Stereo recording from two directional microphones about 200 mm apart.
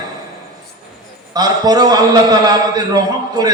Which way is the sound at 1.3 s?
20° right (ahead or behind).